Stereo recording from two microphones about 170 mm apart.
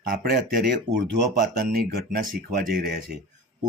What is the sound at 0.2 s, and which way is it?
Speech, 75° right (ahead or behind).